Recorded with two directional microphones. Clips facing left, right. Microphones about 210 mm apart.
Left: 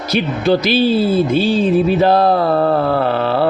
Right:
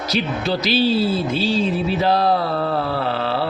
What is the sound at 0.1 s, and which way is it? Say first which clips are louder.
Speech: left 7 dB; 55° left (ahead or behind).